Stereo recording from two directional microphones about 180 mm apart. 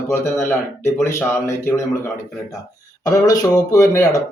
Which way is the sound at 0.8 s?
15° left (ahead or behind).